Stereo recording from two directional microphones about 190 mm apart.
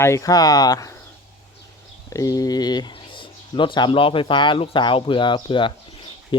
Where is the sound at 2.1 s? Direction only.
20° left (ahead or behind).